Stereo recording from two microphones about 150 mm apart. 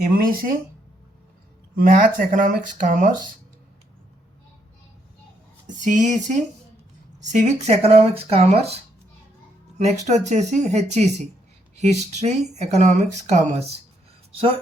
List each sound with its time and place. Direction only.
0.0 s speech: 75° right (ahead or behind)
1.7 s speech: 65° right (ahead or behind)
5.6 s speech: 55° right (ahead or behind)